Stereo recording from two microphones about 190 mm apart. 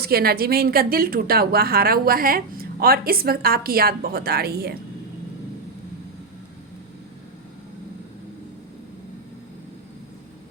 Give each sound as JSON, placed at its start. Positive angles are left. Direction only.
{"t": 0.0, "sound": "a woman's voice", "side_deg": -55}